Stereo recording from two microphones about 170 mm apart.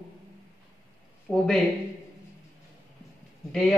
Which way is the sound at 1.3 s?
Centre (ahead or behind).